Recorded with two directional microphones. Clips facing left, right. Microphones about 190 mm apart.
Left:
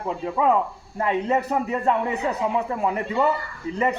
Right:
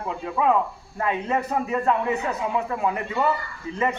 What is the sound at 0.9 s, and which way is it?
A man's voice, 30° left (ahead or behind).